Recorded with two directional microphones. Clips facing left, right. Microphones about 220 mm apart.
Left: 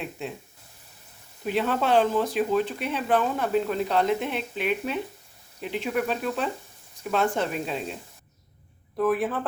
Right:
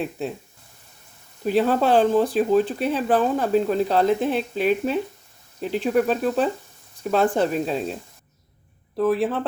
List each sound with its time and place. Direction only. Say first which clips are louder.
0.2 s speech: right 3 dB; 35° right (ahead or behind)
1.5 s speech: right 5 dB; 35° right (ahead or behind)
9.0 s speech: right 3 dB; 30° right (ahead or behind)